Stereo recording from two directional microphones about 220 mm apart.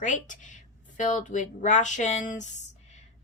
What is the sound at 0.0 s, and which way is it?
Speech, 35° left (ahead or behind).